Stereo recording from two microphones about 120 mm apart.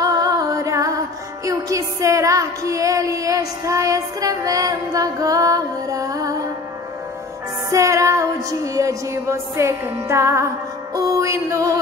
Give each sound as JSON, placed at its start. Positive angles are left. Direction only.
{"t": 0.0, "sound": "music", "side_deg": -30}
{"t": 7.7, "sound": "music", "side_deg": -25}